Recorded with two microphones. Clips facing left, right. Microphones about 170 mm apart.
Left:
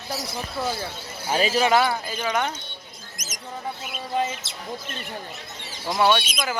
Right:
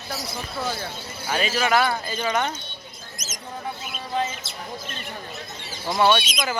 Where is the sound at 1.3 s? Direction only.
35° left (ahead or behind).